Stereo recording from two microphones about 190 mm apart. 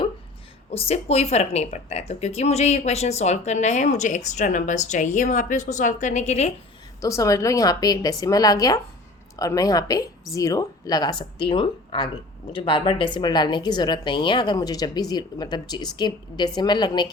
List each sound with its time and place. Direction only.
0.7 s speech: 30° left (ahead or behind)
7.0 s a woman's voice: 15° left (ahead or behind)